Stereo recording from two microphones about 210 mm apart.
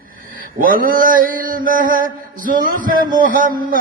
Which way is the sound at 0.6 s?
40° right (ahead or behind).